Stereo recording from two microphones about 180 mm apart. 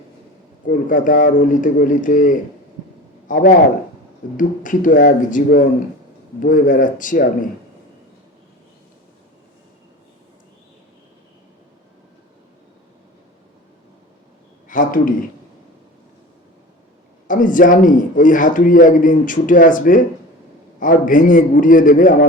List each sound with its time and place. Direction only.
0.7 s a man's voice: 50° left (ahead or behind)
14.7 s a sound: 50° left (ahead or behind)
17.2 s a man's voice: 45° left (ahead or behind)